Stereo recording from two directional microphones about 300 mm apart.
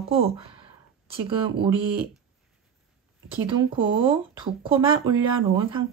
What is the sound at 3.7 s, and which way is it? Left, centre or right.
Speech, centre.